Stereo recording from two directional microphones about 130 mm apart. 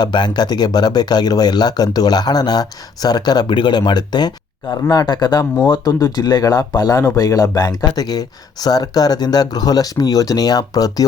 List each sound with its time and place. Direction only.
0.0 s speech: 35° left (ahead or behind)